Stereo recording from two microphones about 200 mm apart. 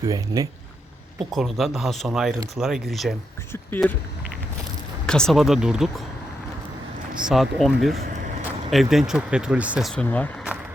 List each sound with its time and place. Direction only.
0.0 s speech: 15° right (ahead or behind)
1.3 s speech: centre (ahead or behind)
5.0 s speech: 5° left (ahead or behind)
7.3 s speech: centre (ahead or behind)